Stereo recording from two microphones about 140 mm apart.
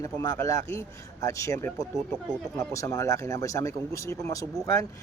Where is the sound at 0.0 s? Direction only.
25° left (ahead or behind).